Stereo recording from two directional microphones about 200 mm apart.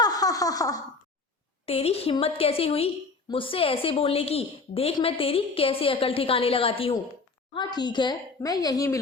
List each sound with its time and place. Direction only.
0.0 s giggle: 20° left (ahead or behind)
1.6 s a woman's voice: 30° left (ahead or behind)